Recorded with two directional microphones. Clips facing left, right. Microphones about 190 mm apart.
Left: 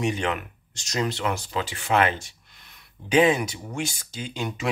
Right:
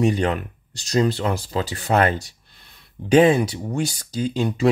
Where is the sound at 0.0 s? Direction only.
35° right (ahead or behind).